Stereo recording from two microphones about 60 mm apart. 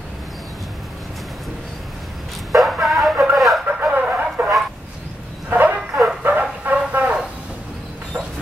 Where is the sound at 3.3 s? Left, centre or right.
Centre.